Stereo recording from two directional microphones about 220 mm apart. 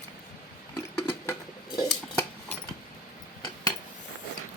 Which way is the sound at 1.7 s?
10° left (ahead or behind).